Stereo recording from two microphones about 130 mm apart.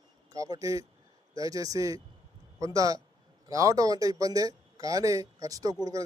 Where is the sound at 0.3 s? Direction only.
30° right (ahead or behind).